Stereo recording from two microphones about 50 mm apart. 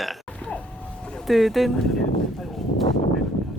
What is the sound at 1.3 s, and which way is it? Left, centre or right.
Speech, centre.